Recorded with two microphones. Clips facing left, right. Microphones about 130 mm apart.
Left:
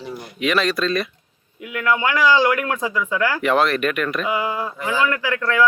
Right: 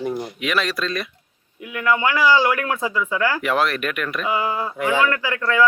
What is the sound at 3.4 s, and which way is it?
Speech, centre (ahead or behind).